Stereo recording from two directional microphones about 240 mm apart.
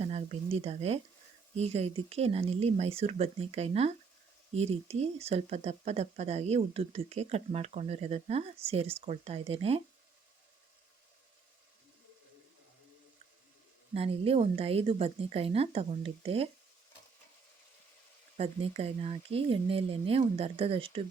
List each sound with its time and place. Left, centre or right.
0.0 s speech: right
13.9 s speech: right
18.3 s speech: right